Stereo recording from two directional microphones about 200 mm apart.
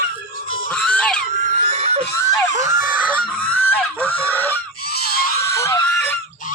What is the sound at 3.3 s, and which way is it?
Goose, 10° left (ahead or behind).